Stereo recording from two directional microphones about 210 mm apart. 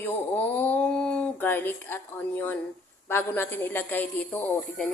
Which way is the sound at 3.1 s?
10° left (ahead or behind).